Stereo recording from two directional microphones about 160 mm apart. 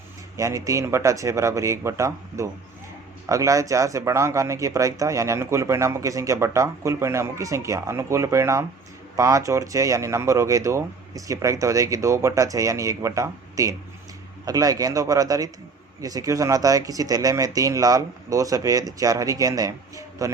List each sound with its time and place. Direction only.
0.3 s speech: 20° right (ahead or behind)